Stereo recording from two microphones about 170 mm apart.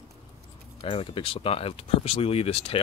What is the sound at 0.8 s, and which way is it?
Speech, 30° left (ahead or behind).